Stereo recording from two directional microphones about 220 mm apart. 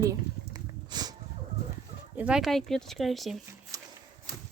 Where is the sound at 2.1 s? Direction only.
5° right (ahead or behind).